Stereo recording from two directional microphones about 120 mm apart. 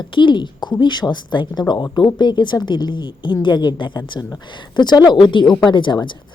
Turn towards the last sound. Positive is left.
turn(degrees=40)  # may be behind; listen again after turning